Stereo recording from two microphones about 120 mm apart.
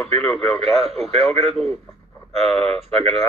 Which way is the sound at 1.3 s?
60° right (ahead or behind).